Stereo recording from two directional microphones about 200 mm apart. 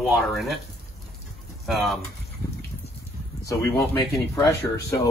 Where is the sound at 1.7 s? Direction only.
Centre (ahead or behind).